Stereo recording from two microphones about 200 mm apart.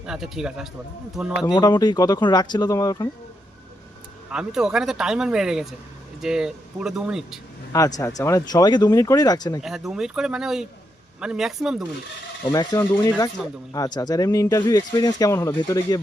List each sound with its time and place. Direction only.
0.0 s speech: 5° right (ahead or behind)
1.5 s speech: 20° left (ahead or behind)
4.3 s speech: 5° right (ahead or behind)
7.7 s speech: 15° left (ahead or behind)
9.6 s speech: centre (ahead or behind)
12.5 s speech: 15° left (ahead or behind)